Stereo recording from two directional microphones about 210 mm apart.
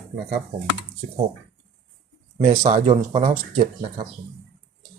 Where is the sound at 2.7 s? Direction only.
35° right (ahead or behind).